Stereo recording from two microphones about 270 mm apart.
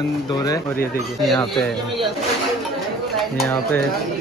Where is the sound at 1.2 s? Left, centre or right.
Centre.